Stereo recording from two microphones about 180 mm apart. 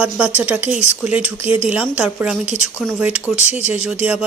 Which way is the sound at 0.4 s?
5° right (ahead or behind).